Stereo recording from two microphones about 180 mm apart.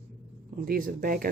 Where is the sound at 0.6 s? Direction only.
55° right (ahead or behind).